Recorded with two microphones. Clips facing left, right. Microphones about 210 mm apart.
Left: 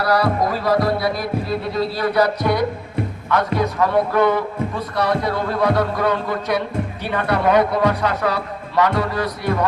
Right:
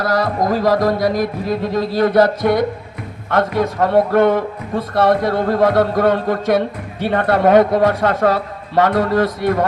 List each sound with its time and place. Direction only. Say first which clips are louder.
0.0 s music: right 1 dB; 45° right (ahead or behind)